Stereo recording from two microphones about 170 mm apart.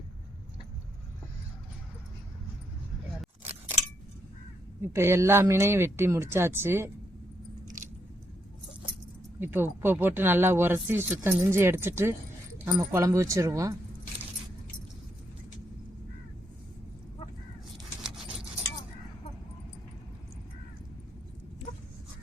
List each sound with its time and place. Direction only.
4.8 s speech: 15° right (ahead or behind)
9.4 s speech: 10° right (ahead or behind)
18.0 s a sound: 5° right (ahead or behind)